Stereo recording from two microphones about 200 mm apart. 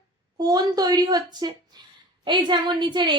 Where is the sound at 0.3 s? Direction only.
20° right (ahead or behind).